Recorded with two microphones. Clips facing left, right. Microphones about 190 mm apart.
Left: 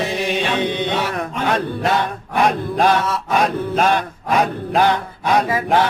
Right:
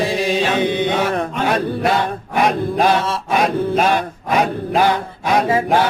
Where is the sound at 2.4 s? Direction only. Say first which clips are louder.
Right 1 dB; 10° right (ahead or behind).